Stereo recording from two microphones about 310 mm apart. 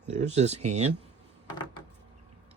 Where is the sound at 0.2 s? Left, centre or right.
Right.